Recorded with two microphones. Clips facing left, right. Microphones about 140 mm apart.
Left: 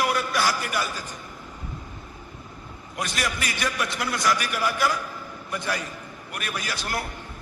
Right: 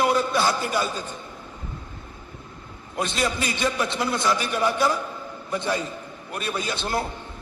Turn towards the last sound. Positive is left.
turn(degrees=-25)  # may be behind; listen again after turning